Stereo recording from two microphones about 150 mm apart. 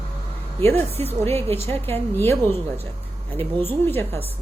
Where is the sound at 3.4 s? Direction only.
15° left (ahead or behind).